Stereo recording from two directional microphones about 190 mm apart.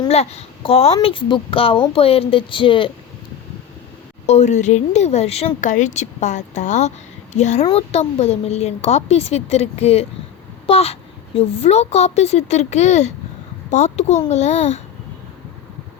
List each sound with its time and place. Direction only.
0.1 s speech: 35° left (ahead or behind)
4.3 s speech: 35° left (ahead or behind)
7.6 s speech: 25° left (ahead or behind)